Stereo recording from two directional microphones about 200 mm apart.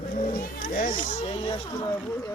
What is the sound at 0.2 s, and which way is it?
Children playing, 40° left (ahead or behind).